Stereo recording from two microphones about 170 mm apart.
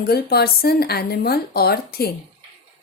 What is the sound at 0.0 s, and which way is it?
Speech, 65° left (ahead or behind).